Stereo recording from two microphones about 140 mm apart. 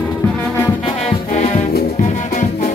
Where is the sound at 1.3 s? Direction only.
55° left (ahead or behind).